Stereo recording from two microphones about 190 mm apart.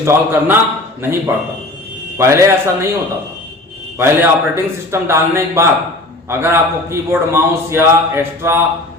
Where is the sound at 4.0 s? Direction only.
10° right (ahead or behind).